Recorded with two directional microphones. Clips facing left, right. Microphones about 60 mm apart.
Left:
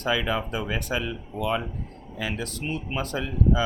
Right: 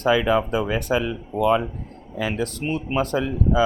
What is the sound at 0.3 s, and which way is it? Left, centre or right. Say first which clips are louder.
Speech: right 7 dB; right.